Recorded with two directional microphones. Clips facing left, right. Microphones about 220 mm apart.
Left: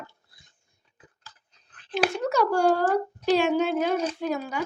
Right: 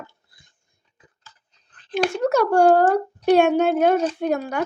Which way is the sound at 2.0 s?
50° right (ahead or behind).